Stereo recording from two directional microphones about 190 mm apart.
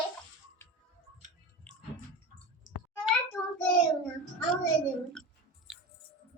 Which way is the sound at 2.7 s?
45° right (ahead or behind).